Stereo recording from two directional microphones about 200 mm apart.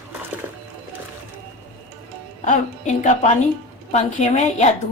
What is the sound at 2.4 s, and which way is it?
A woman's voice, 35° left (ahead or behind).